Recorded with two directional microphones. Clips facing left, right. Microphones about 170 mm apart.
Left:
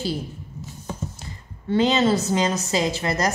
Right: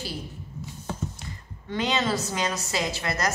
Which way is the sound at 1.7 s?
25° left (ahead or behind).